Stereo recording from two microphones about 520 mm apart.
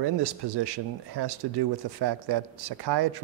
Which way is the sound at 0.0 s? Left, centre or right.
Right.